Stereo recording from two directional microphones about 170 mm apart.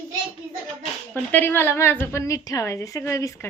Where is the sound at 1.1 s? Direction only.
10° left (ahead or behind).